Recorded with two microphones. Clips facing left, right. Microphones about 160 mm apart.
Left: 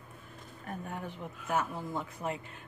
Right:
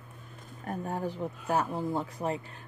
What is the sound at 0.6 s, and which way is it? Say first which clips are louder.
Speech: right 7 dB; 35° right (ahead or behind).